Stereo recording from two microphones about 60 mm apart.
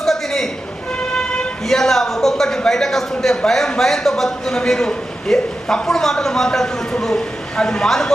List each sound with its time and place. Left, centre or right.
0.0 s a sound: centre
1.1 s vehicle: centre
1.6 s a man's voice: centre